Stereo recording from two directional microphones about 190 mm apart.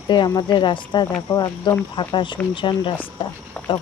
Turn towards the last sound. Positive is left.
turn(degrees=5)  # may be behind; listen again after turning